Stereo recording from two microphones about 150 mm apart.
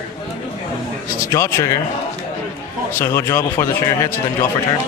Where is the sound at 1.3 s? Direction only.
20° left (ahead or behind).